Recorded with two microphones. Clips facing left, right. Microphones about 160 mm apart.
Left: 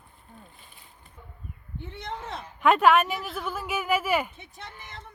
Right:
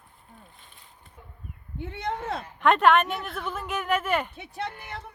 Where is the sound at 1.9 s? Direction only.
60° right (ahead or behind).